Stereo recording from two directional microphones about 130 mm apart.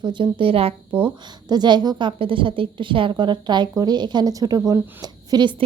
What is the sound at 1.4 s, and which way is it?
A woman's voice, 35° right (ahead or behind).